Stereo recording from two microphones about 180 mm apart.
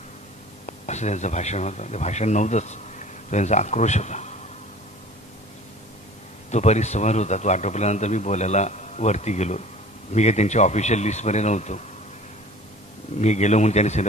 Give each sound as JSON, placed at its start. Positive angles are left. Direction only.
{"t": 0.7, "sound": "speech", "side_deg": 40}
{"t": 6.5, "sound": "speech", "side_deg": 40}
{"t": 13.2, "sound": "speech", "side_deg": 40}